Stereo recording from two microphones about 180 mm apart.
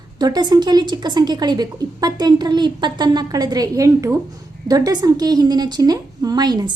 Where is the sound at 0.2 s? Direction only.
25° right (ahead or behind).